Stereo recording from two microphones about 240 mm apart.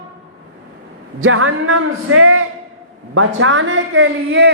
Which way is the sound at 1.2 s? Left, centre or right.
Right.